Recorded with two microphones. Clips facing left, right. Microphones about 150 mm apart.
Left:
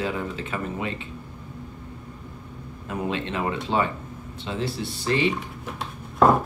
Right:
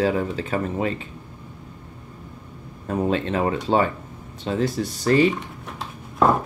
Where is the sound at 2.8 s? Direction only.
40° right (ahead or behind).